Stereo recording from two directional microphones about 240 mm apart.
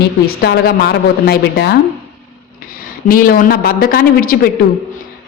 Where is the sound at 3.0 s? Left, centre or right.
Left.